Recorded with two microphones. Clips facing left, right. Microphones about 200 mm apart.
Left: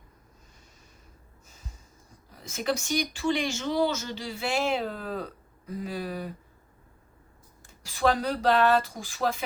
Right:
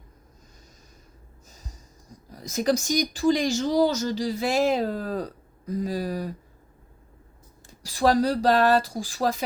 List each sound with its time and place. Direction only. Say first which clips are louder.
2.3 s speech: right 6 dB; 40° right (ahead or behind)
7.7 s speech: right 4 dB; 35° right (ahead or behind)